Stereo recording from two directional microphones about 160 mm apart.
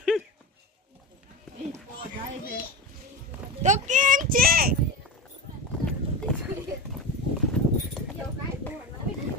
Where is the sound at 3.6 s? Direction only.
50° right (ahead or behind); by 4.7 s 70° right (ahead or behind).